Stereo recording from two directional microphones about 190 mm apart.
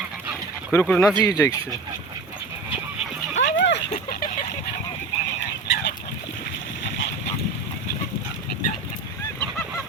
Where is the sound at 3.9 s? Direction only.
45° left (ahead or behind).